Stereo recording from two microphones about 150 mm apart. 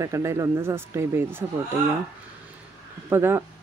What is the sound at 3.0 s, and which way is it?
Speech, 15° right (ahead or behind).